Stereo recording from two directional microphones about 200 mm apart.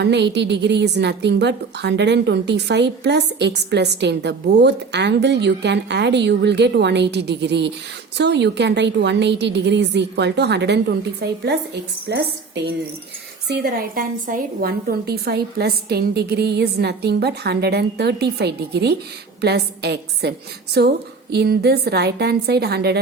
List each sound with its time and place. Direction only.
0.0 s a woman's voice: 60° right (ahead or behind)